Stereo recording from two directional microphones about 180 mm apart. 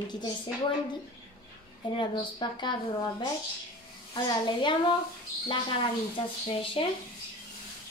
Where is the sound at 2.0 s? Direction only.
25° left (ahead or behind).